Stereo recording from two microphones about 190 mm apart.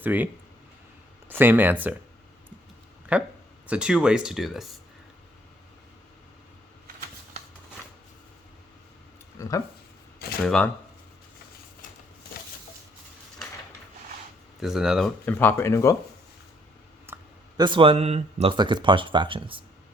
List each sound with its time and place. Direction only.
0.0 s speech: 10° right (ahead or behind)
1.3 s speech: 10° right (ahead or behind)
3.1 s speech: 5° right (ahead or behind)
9.4 s speech: 15° left (ahead or behind)
10.4 s speech: 5° left (ahead or behind)
14.6 s speech: centre (ahead or behind)
15.3 s speech: 10° left (ahead or behind)
17.1 s clicking: 10° right (ahead or behind)
17.6 s speech: 25° right (ahead or behind)